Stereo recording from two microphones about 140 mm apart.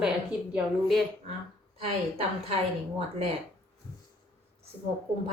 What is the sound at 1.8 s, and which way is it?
Speech, 45° right (ahead or behind).